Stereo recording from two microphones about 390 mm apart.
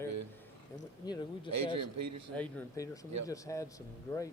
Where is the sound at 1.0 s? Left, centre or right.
Centre.